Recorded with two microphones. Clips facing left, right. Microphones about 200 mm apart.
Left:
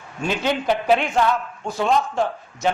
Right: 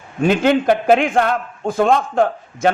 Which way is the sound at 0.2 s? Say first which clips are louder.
Right 8 dB; 55° right (ahead or behind).